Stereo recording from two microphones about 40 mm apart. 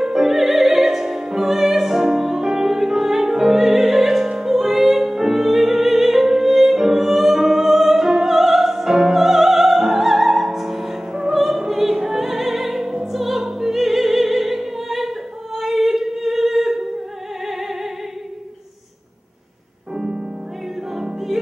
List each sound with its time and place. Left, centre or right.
0.0 s music: centre
11.3 s opera: centre
20.0 s music: centre